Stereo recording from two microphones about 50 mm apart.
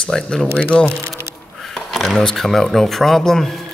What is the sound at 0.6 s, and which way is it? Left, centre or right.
Speech, left.